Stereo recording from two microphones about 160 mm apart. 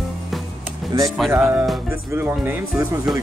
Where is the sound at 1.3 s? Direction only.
15° right (ahead or behind).